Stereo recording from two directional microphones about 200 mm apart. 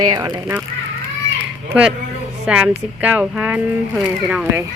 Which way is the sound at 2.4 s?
5° right (ahead or behind).